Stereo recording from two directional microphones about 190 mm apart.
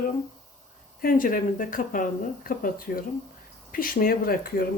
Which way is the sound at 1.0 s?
45° left (ahead or behind).